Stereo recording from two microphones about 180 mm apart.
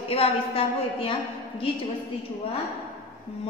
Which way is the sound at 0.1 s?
30° left (ahead or behind).